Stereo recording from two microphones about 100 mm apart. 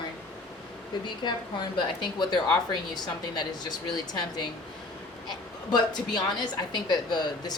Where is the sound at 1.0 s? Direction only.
50° left (ahead or behind).